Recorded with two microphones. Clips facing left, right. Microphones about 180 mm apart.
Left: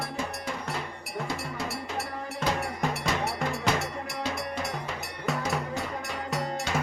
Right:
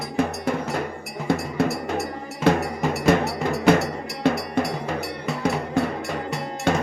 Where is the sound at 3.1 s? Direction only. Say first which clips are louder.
Right 14 dB; 55° right (ahead or behind).